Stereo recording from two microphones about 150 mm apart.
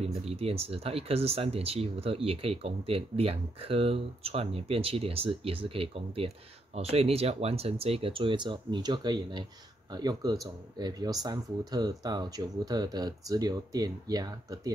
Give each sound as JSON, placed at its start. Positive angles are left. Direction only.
{"t": 0.0, "sound": "speech", "side_deg": -40}